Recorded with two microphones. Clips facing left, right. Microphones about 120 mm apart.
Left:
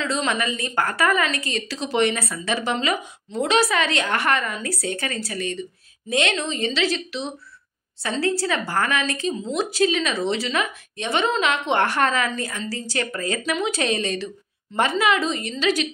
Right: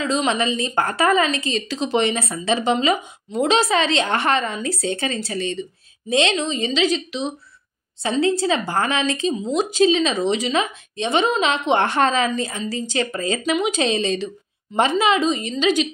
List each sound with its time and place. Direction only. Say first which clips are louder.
0.0 s speech: right 3 dB; 15° right (ahead or behind)